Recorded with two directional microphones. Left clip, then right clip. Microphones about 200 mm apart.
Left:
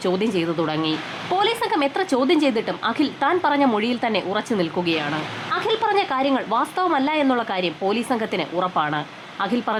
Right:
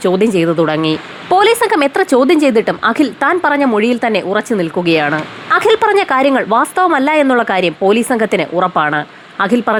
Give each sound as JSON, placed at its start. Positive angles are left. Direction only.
{"t": 0.0, "sound": "speech", "side_deg": -20}